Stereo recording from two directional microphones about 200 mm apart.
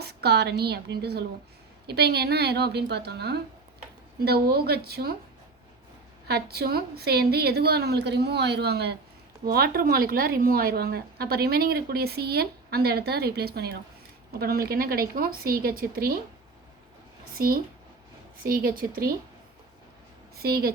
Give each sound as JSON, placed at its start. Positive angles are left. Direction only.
{"t": 0.0, "sound": "a woman's voice", "side_deg": -55}
{"t": 6.2, "sound": "a woman's voice", "side_deg": -50}
{"t": 17.3, "sound": "a woman's voice", "side_deg": -45}
{"t": 20.3, "sound": "a woman's voice", "side_deg": -50}